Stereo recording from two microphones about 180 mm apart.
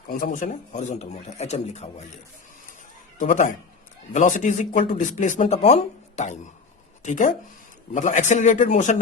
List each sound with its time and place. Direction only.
0.1 s a man's voice: 50° left (ahead or behind)
3.2 s speech: 45° left (ahead or behind)